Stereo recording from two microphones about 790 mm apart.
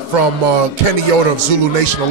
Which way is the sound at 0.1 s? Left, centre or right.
Right.